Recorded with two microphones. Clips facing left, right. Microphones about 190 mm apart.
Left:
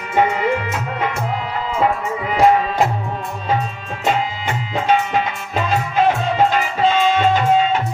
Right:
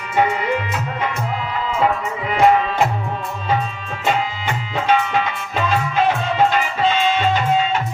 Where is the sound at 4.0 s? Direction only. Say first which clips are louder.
Left 1 dB; 40° left (ahead or behind).